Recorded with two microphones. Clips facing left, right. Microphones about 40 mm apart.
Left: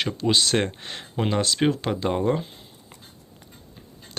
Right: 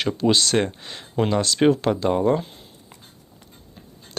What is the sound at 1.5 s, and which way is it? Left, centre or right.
Speech, centre.